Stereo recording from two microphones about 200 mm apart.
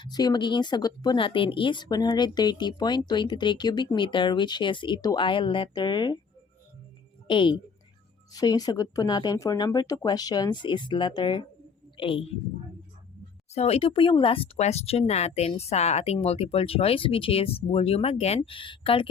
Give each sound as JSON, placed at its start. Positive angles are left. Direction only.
{"t": 0.0, "sound": "speech", "side_deg": 20}
{"t": 7.3, "sound": "a woman's voice", "side_deg": 25}
{"t": 13.5, "sound": "speech", "side_deg": 30}